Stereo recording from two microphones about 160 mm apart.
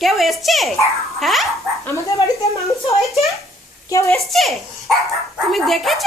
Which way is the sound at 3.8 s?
20° left (ahead or behind).